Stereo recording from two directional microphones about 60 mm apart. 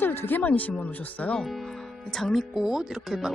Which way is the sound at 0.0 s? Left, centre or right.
Left.